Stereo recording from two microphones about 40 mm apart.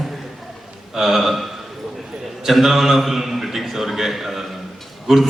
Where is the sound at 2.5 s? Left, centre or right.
Centre.